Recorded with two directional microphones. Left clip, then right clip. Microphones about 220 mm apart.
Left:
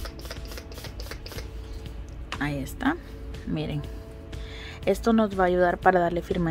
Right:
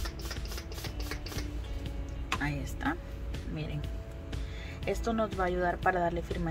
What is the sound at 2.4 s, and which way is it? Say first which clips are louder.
Speech: left 11 dB; 50° left (ahead or behind).